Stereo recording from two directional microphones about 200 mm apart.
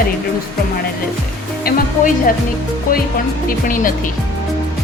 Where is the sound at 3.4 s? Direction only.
45° left (ahead or behind).